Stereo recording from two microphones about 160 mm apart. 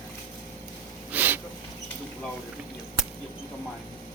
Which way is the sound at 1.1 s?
10° right (ahead or behind).